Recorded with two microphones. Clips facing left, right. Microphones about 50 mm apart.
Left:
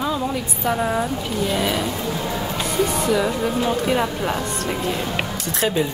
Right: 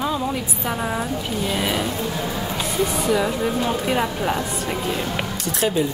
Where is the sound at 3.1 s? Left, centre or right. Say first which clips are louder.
Even; centre.